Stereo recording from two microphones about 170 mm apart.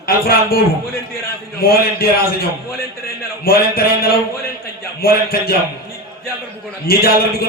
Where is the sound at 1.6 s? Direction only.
60° left (ahead or behind).